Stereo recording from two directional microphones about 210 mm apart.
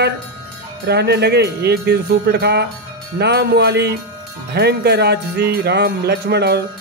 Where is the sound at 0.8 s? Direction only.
50° right (ahead or behind).